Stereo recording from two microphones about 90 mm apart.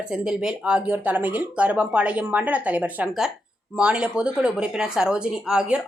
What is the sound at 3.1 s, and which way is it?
Speech, 5° right (ahead or behind).